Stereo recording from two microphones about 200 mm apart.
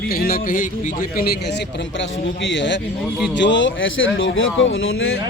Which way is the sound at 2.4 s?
65° left (ahead or behind).